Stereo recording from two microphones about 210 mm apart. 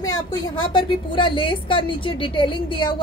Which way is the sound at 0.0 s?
15° left (ahead or behind).